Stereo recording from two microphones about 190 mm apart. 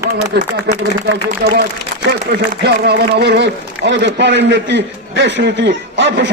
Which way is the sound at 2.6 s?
60° right (ahead or behind).